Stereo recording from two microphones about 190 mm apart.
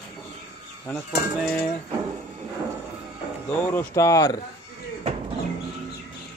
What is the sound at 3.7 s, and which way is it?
Speech, 15° left (ahead or behind).